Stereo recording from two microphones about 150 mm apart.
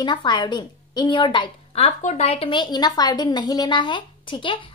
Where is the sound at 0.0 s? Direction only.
30° left (ahead or behind).